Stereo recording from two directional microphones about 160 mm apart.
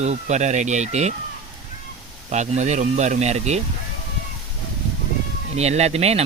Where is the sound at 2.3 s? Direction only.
45° right (ahead or behind).